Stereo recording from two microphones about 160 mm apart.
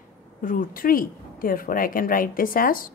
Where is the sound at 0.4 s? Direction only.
60° left (ahead or behind).